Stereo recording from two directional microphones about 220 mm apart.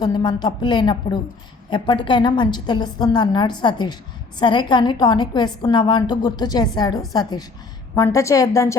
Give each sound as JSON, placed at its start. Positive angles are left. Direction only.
{"t": 0.0, "sound": "a woman's voice", "side_deg": 20}